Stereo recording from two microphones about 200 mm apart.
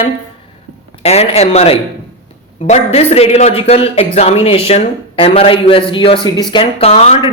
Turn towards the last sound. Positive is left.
turn(degrees=30)  # may be behind; listen again after turning